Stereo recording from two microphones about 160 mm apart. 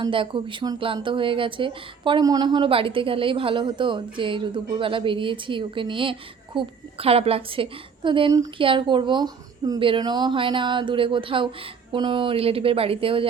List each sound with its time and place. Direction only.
0.0 s speech: 30° right (ahead or behind)